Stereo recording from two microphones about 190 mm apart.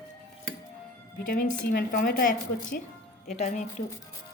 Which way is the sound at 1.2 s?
50° left (ahead or behind).